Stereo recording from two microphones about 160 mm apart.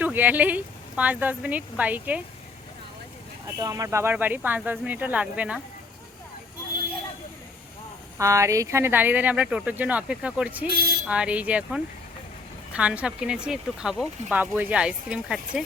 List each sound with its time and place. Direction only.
0.0 s speech: 10° right (ahead or behind)
3.4 s speech: 20° right (ahead or behind)
8.2 s speech: 20° right (ahead or behind)